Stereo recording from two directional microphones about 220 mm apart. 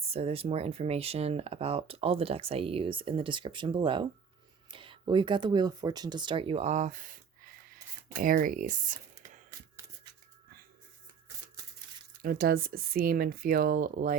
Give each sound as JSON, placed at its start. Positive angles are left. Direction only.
{"t": 0.0, "sound": "speech", "side_deg": -25}
{"t": 9.5, "sound": "a sound", "side_deg": -15}
{"t": 12.1, "sound": "speech", "side_deg": -45}